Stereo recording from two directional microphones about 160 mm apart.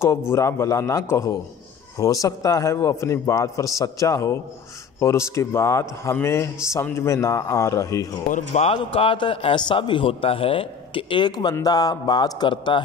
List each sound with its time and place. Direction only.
0.3 s a man's voice: 15° left (ahead or behind)
8.3 s a man's voice: 55° left (ahead or behind)
8.6 s a man's voice: 35° left (ahead or behind)